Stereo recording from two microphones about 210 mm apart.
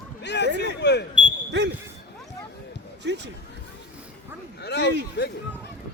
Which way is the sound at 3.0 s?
55° right (ahead or behind).